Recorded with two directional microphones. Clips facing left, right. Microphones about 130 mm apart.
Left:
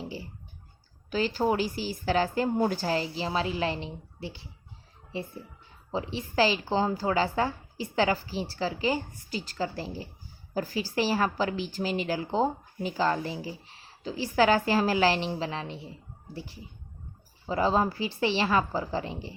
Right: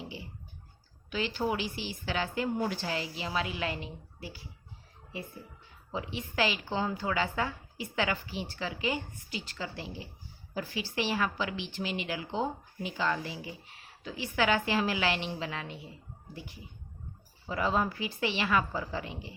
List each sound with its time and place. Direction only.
0.0 s a sound: 35° left (ahead or behind)
1.1 s a woman's voice: 40° left (ahead or behind)
5.9 s a woman's voice: 30° left (ahead or behind)